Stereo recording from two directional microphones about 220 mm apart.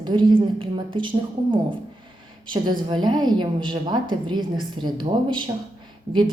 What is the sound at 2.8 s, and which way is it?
A woman's voice, 20° right (ahead or behind).